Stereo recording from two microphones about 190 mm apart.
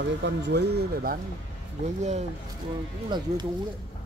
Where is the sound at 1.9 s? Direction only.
35° right (ahead or behind).